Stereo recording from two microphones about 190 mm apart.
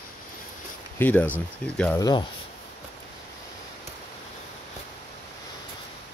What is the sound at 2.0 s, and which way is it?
Speech, 20° left (ahead or behind).